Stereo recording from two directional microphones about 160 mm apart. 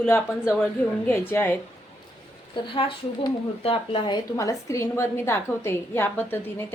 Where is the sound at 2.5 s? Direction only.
35° left (ahead or behind).